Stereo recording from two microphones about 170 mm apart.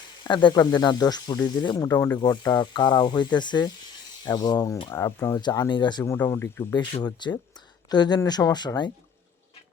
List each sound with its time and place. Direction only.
0.3 s speech: 25° left (ahead or behind)
6.1 s speech: 15° left (ahead or behind)
6.7 s speech: 25° left (ahead or behind)